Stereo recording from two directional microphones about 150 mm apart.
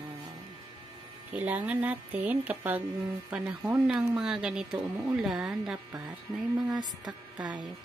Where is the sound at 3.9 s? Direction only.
5° right (ahead or behind).